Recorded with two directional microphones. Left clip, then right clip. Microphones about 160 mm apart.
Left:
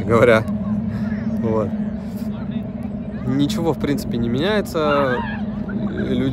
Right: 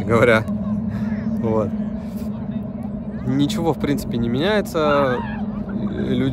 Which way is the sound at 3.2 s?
30° right (ahead or behind).